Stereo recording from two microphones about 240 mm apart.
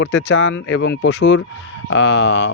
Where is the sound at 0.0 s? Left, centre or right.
Left.